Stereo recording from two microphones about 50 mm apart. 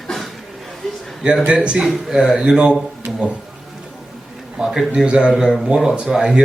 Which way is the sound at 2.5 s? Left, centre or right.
Centre.